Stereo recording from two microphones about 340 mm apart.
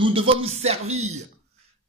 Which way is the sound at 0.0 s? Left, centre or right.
Centre.